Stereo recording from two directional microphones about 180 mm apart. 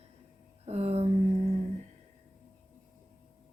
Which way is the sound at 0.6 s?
35° right (ahead or behind).